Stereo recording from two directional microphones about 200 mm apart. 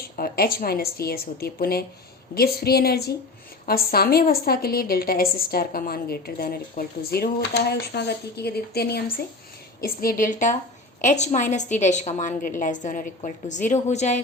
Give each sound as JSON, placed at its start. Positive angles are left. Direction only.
{"t": 0.2, "sound": "a woman's voice", "side_deg": 45}